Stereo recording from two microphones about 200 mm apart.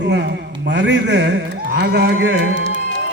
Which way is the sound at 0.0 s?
60° right (ahead or behind).